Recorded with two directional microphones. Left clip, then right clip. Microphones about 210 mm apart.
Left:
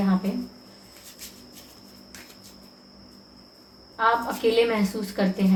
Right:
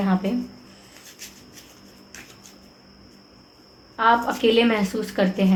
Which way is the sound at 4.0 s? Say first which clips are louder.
Right 3 dB; 45° right (ahead or behind).